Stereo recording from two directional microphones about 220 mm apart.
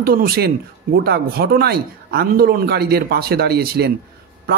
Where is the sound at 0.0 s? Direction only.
45° right (ahead or behind).